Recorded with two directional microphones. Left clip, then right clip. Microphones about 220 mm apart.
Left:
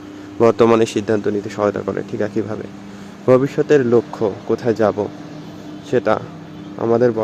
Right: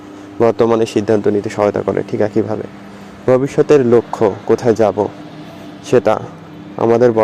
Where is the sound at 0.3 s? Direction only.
Centre (ahead or behind).